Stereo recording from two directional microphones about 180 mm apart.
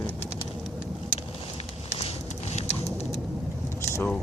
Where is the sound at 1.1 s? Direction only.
35° left (ahead or behind).